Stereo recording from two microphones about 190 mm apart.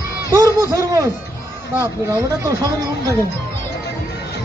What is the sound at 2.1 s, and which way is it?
Speech, 15° right (ahead or behind).